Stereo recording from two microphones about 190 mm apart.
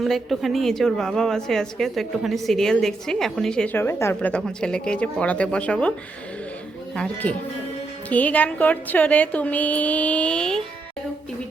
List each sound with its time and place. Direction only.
0.0 s a woman's voice: centre (ahead or behind)
6.9 s a woman's voice: 5° left (ahead or behind)